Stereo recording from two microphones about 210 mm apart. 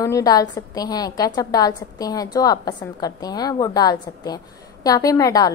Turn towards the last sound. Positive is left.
turn(degrees=15)  # may be behind; listen again after turning